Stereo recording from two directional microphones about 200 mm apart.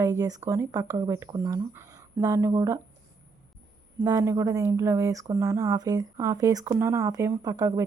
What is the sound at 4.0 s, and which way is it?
A woman's voice, 15° right (ahead or behind).